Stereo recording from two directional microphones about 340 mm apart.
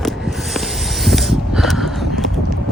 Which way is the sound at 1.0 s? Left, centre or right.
Centre.